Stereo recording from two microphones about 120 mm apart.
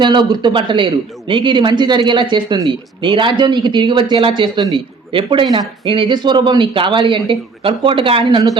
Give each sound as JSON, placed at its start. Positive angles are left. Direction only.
{"t": 0.0, "sound": "a man's voice", "side_deg": -40}